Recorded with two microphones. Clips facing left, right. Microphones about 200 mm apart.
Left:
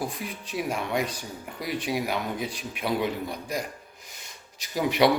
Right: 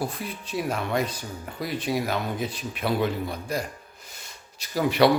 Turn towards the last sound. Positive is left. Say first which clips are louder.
# right 2 dB
turn(degrees=15)  # may be behind; listen again after turning